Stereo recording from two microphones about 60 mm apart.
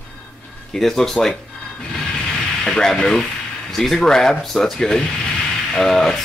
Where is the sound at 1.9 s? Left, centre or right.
Centre.